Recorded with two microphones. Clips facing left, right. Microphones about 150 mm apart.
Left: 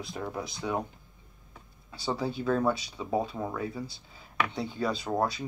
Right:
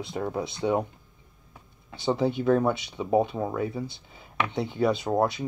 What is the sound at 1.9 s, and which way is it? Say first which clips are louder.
Speech: right 6 dB; 25° right (ahead or behind).